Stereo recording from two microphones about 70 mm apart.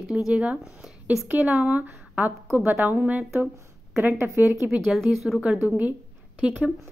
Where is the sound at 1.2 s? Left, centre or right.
Right.